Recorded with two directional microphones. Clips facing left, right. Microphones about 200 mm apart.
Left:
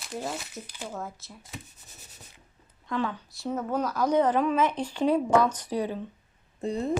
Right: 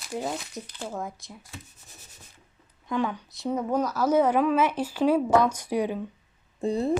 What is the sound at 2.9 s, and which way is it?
A woman's voice, 15° right (ahead or behind).